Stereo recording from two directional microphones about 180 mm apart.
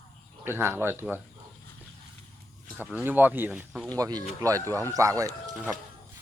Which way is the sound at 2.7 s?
10° right (ahead or behind).